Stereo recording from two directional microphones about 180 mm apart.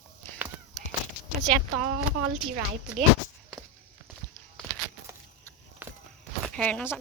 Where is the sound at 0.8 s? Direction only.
Centre (ahead or behind).